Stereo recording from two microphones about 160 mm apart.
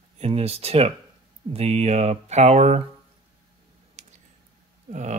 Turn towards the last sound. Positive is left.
turn(degrees=-50)  # may be behind; listen again after turning